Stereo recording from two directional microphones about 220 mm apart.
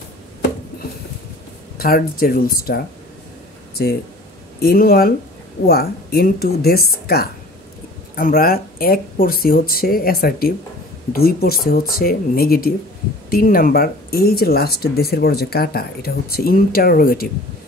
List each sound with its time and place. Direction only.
1.8 s speech: 40° left (ahead or behind)
4.6 s speech: 45° left (ahead or behind)